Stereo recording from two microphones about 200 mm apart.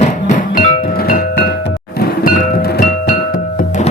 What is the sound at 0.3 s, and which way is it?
Music, 45° left (ahead or behind).